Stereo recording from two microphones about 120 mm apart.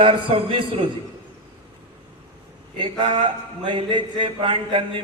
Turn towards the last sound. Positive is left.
turn(degrees=-45)  # may be behind; listen again after turning